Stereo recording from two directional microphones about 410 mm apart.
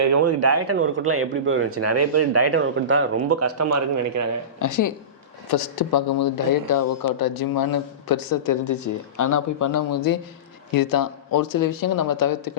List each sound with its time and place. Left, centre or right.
0.0 s speech: right
4.6 s a man's voice: left
5.5 s a man's voice: left